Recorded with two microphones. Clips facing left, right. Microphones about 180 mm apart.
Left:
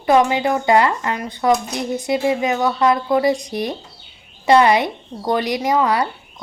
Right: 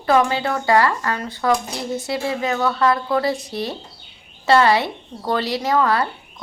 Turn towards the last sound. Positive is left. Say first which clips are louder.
# left 1 dB
turn(degrees=15)  # may be behind; listen again after turning